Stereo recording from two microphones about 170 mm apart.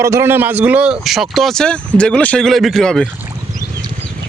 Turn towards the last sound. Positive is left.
turn(degrees=0)  # may be behind; listen again after turning